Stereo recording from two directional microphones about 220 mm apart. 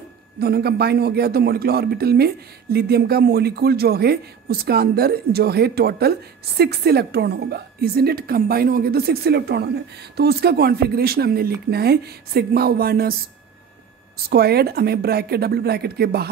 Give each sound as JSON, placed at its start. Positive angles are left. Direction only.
{"t": 0.4, "sound": "a man's voice", "side_deg": -45}
{"t": 14.1, "sound": "a man's voice", "side_deg": -45}